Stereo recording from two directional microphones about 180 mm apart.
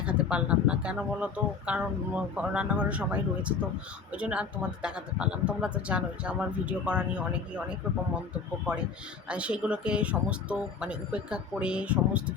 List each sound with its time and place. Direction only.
0.0 s speech: 5° right (ahead or behind)
8.1 s speech: 5° right (ahead or behind)